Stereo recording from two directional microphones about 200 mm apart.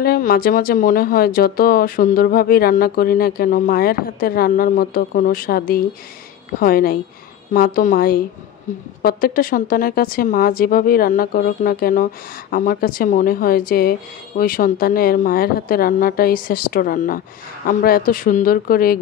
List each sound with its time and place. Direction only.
0.0 s speech: 50° left (ahead or behind)